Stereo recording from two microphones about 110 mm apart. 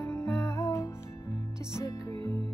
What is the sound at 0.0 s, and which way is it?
Music, 25° left (ahead or behind).